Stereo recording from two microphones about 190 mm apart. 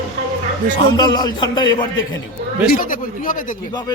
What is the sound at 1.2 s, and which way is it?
Speech, 20° left (ahead or behind).